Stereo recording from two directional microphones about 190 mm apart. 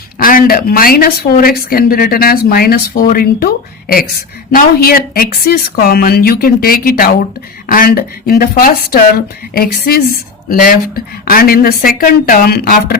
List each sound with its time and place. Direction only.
0.2 s a woman's voice: 50° left (ahead or behind)